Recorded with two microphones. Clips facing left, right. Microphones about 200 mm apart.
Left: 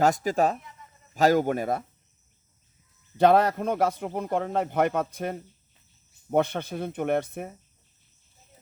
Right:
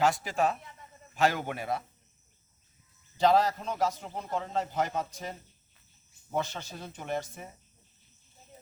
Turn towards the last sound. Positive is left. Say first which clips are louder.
# left 9 dB
turn(degrees=60)  # may be behind; listen again after turning